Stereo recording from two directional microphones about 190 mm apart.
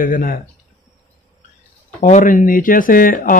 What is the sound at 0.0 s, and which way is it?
Speech, 45° left (ahead or behind).